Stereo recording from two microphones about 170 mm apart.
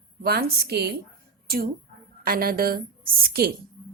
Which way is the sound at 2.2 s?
55° right (ahead or behind).